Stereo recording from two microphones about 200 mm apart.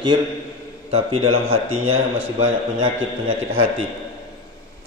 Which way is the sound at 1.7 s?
90° right.